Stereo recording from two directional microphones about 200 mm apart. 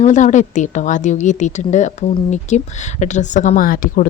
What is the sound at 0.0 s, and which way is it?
A woman's voice, 35° left (ahead or behind).